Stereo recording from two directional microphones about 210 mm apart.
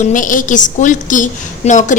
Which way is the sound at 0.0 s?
40° left (ahead or behind).